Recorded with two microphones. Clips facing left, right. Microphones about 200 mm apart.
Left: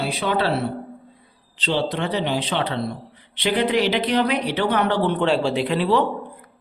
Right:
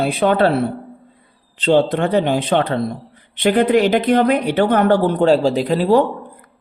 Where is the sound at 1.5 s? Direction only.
50° right (ahead or behind).